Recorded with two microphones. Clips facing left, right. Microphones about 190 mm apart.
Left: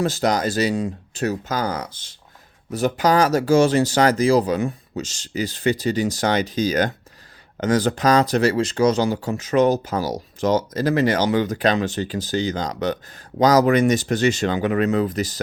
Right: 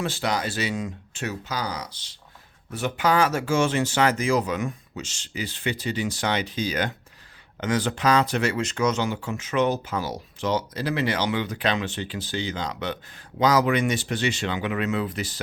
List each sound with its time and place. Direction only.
0.0 s speech: 40° left (ahead or behind)
2.7 s speech: 40° left (ahead or behind)